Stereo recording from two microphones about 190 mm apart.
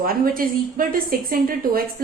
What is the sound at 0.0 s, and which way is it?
A woman's voice, 50° right (ahead or behind).